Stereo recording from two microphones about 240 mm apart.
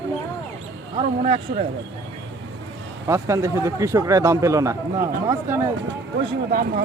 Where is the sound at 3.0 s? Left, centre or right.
Centre.